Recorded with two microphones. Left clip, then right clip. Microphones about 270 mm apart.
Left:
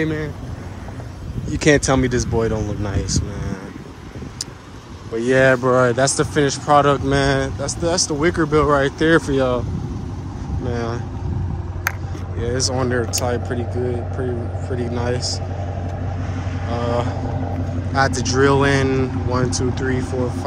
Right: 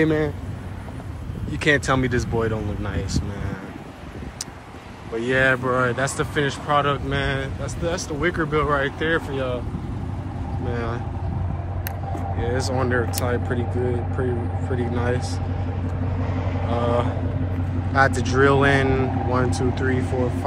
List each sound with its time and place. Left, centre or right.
0.0 s speech: centre
1.5 s speech: centre
5.1 s speech: centre
10.7 s vehicle: centre
12.4 s speech: centre
16.6 s speech: centre